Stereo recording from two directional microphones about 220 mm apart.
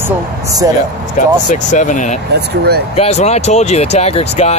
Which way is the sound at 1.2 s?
35° left (ahead or behind).